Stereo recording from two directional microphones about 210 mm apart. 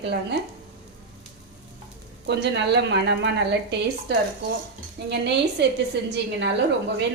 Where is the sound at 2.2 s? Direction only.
55° right (ahead or behind).